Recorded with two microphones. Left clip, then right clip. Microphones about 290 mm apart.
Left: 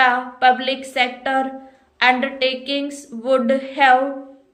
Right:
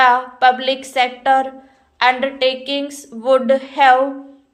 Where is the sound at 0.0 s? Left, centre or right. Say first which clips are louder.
Right 3 dB; centre.